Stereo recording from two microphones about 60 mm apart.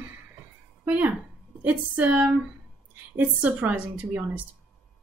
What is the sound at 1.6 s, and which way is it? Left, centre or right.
A woman's voice, right.